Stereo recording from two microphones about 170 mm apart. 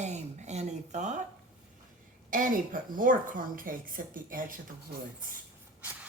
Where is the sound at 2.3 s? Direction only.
55° right (ahead or behind).